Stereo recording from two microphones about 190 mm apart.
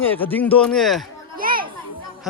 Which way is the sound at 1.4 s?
50° right (ahead or behind).